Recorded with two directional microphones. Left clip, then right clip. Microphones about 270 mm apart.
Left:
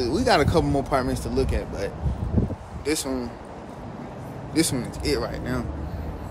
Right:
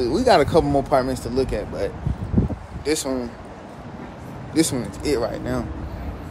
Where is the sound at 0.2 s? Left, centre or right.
Centre.